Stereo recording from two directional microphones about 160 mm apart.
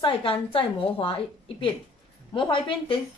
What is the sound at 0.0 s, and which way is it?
A woman's voice, 35° left (ahead or behind).